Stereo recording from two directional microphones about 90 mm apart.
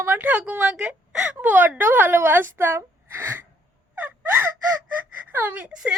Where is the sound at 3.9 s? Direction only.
25° right (ahead or behind).